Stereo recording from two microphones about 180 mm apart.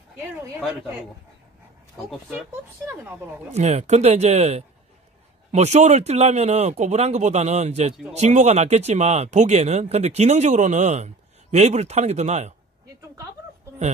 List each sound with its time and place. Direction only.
2.0 s speech: centre (ahead or behind)
3.5 s speech: 35° right (ahead or behind)